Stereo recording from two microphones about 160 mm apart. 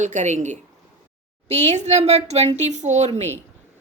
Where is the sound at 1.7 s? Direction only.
45° right (ahead or behind).